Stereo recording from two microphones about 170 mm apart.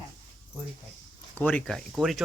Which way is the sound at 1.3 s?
10° left (ahead or behind).